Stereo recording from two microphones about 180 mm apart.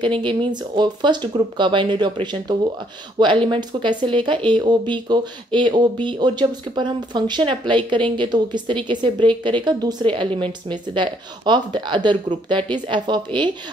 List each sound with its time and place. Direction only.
0.0 s speech: 25° right (ahead or behind)